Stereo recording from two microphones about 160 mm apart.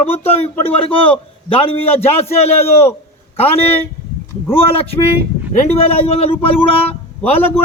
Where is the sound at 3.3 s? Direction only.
40° left (ahead or behind).